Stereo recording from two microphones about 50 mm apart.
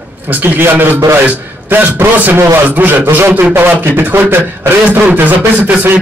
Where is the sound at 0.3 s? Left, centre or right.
Right.